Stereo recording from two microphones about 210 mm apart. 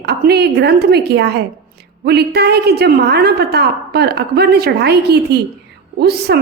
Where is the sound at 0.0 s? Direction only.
50° right (ahead or behind).